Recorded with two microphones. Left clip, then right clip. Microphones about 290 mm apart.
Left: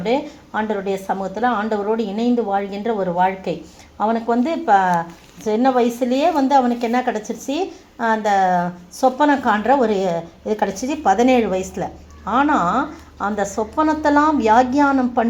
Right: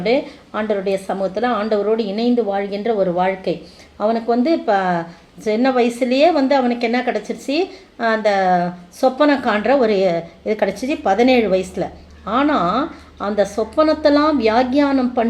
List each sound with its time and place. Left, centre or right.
0.0 s speech: left